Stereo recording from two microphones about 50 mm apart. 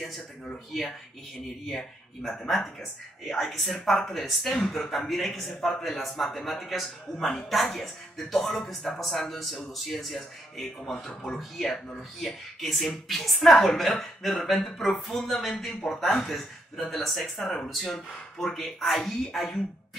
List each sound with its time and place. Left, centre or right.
1.7 s a man's voice: centre
11.6 s speech: centre
12.3 s a man's voice: centre